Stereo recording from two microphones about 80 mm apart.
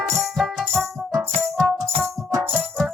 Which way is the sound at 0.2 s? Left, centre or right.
Centre.